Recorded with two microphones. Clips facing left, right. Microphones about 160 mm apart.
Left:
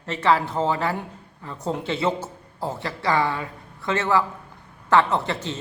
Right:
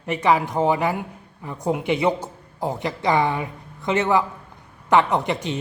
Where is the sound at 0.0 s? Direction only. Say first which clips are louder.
Right 1 dB; 15° right (ahead or behind).